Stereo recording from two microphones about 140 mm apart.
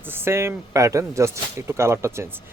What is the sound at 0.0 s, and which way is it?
Speech, 15° right (ahead or behind).